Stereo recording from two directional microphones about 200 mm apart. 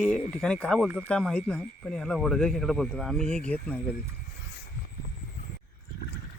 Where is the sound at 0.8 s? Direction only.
10° right (ahead or behind).